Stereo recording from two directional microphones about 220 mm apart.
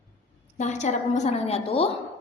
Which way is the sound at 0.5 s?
30° left (ahead or behind).